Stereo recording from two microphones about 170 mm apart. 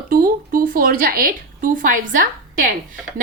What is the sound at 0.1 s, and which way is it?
A woman's voice, 55° right (ahead or behind).